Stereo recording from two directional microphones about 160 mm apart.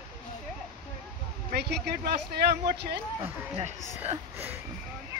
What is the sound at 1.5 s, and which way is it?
Speech, 90° right.